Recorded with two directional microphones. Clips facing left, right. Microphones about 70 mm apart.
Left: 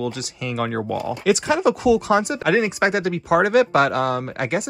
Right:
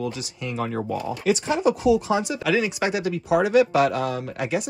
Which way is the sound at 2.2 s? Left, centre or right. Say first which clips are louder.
Left 3 dB; left.